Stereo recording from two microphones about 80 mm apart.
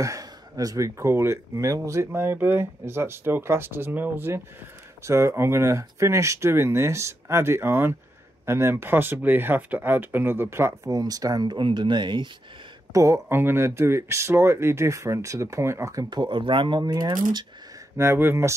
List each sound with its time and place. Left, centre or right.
0.0 s speech: right
10.9 s speech: right
11.4 s speech: right
12.9 s speech: right
13.3 s speech: right
16.1 s speech: right
16.8 s speech: right
17.9 s speech: right